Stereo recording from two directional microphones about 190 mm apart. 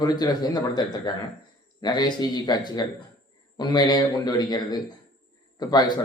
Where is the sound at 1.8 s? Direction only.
20° left (ahead or behind).